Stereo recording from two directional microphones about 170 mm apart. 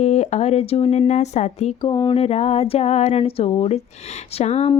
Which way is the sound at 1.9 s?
30° left (ahead or behind).